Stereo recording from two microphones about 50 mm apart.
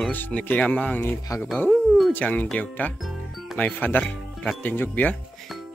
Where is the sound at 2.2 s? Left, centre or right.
Left.